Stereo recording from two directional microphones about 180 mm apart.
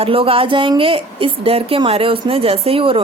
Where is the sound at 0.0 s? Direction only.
30° right (ahead or behind).